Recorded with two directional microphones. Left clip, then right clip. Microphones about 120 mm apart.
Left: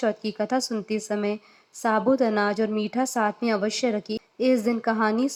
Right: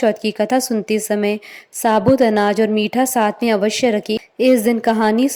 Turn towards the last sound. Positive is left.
turn(degrees=-55)  # may be behind; listen again after turning